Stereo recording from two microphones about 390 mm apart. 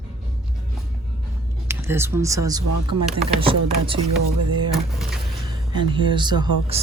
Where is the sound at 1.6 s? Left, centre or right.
Centre.